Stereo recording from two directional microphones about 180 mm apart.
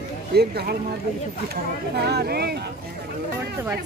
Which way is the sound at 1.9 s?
65° right (ahead or behind).